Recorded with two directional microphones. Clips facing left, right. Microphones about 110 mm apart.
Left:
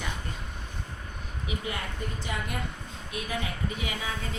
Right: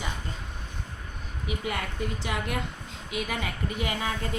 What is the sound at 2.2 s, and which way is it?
Speech, 90° right.